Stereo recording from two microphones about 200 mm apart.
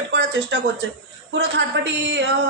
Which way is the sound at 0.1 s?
60° right (ahead or behind).